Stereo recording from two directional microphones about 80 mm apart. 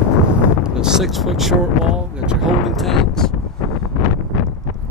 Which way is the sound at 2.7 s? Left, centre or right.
Centre.